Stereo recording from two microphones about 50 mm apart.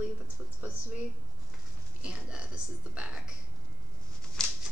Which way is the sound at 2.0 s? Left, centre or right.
Right.